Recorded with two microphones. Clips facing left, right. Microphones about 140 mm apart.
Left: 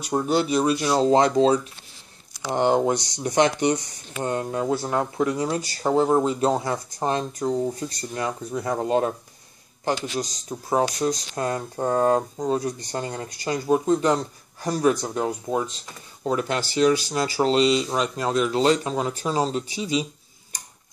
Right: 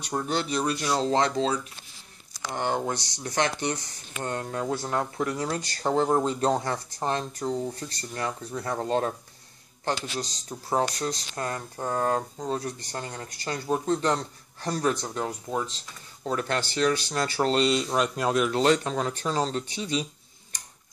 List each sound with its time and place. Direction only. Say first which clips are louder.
0.3 s speech: left 7 dB; 10° left (ahead or behind)